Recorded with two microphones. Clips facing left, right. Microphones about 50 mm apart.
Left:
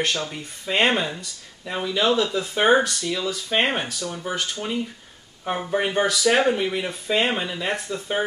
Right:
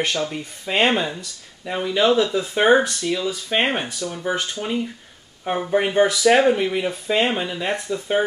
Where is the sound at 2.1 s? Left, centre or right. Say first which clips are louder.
Right 3 dB; right.